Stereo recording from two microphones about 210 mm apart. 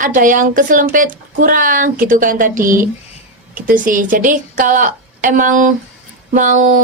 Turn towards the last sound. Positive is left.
turn(degrees=-40)  # may be behind; listen again after turning